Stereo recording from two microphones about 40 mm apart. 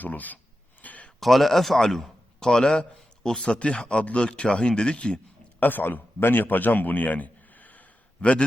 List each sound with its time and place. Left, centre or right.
0.0 s speech: left
0.8 s a sound: left
1.2 s a man's voice: centre
3.4 s speech: left
5.5 s a man's voice: left